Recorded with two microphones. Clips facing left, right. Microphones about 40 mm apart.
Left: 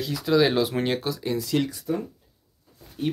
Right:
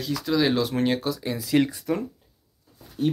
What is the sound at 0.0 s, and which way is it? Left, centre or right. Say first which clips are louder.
Speech: left 2 dB; centre.